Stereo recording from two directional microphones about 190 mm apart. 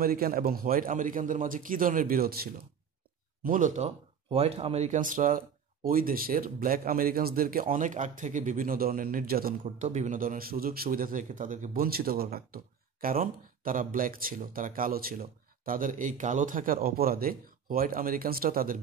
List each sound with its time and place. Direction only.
0.0 s speech: 50° right (ahead or behind)
9.8 s speech: 40° right (ahead or behind)